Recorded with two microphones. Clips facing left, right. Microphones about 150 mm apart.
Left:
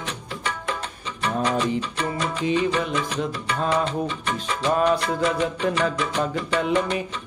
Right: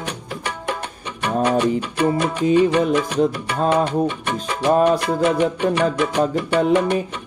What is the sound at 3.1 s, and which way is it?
Music, 35° right (ahead or behind).